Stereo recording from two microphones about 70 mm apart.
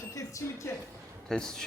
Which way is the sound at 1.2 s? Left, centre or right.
Centre.